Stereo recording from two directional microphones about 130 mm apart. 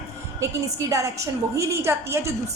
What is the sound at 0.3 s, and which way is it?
A woman's voice, 25° right (ahead or behind).